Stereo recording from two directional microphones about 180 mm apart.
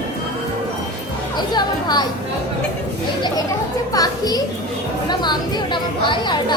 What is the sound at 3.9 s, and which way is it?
A woman's voice, 20° left (ahead or behind).